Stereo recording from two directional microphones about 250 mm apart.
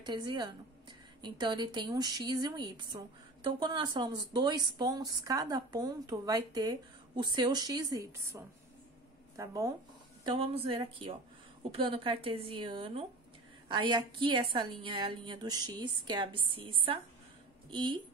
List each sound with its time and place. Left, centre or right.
0.0 s a woman's voice: centre
9.4 s a woman's voice: centre